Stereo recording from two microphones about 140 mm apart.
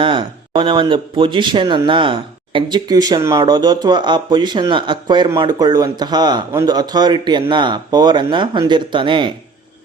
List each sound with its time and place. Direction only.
0.0 s speech: 35° right (ahead or behind)